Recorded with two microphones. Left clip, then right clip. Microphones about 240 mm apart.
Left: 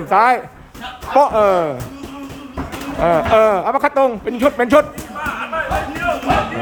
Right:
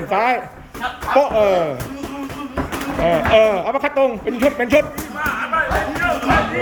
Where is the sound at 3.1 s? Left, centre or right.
Centre.